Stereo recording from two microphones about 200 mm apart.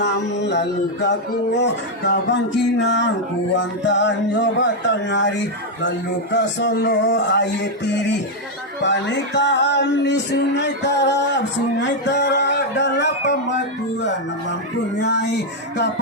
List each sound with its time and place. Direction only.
0.0 s music: 60° left (ahead or behind)
6.3 s music: 65° left (ahead or behind)
15.0 s music: 60° left (ahead or behind)